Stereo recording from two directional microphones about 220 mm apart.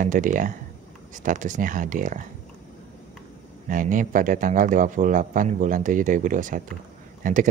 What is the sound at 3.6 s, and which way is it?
Speech, 35° right (ahead or behind).